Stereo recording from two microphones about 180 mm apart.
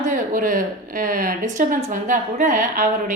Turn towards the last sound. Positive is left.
turn(degrees=-50)  # may be behind; listen again after turning